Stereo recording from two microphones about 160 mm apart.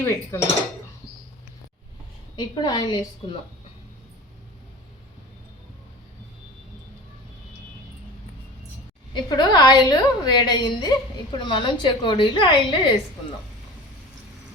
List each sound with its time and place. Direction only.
0.0 s dishes: 15° left (ahead or behind)
2.3 s a woman's voice: 25° left (ahead or behind)
9.1 s a woman's voice: 25° left (ahead or behind)